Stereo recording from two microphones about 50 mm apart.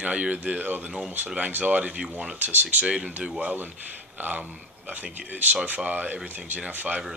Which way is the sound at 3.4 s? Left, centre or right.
Right.